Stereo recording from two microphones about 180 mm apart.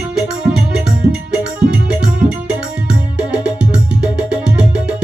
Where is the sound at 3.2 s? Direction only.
5° right (ahead or behind).